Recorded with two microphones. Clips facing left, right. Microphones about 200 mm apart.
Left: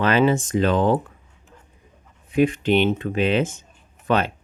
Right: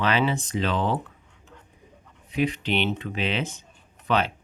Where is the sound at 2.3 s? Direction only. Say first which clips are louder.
Left 7 dB; 50° left (ahead or behind).